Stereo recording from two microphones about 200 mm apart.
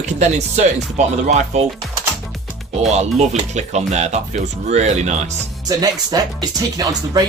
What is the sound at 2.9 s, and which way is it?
Speech, 35° right (ahead or behind).